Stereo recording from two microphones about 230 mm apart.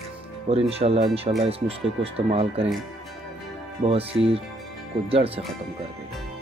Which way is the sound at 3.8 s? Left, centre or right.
Right.